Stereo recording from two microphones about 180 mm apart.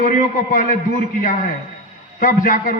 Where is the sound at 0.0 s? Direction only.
50° left (ahead or behind).